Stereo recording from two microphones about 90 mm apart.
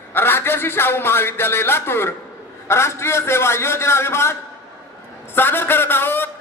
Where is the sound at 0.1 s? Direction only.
25° left (ahead or behind).